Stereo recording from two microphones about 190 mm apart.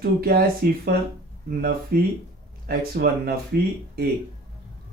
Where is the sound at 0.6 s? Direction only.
55° right (ahead or behind).